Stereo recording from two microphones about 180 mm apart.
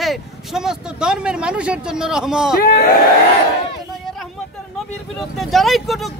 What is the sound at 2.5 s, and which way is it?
Speech, 55° left (ahead or behind).